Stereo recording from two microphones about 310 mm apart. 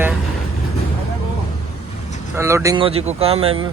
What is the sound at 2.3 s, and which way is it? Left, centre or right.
Speech, centre.